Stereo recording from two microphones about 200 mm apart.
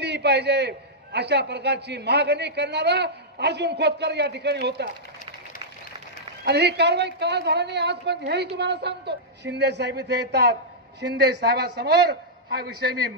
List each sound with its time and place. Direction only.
0.0 s a man's voice: 55° right (ahead or behind)
6.4 s a man's voice: 55° right (ahead or behind)